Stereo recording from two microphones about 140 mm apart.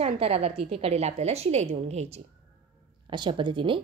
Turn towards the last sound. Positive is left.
turn(degrees=-35)  # may be behind; listen again after turning